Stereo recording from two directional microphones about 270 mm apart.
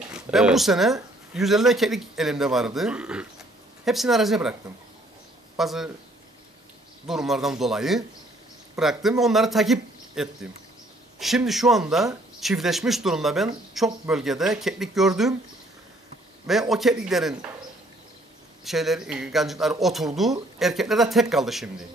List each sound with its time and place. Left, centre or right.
0.1 s speech: centre
5.6 s speech: centre
7.1 s speech: centre
16.4 s speech: centre
18.6 s speech: centre